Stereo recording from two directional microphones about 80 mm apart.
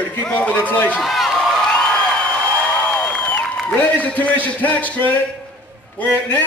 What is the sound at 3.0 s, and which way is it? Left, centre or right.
A man's voice, centre.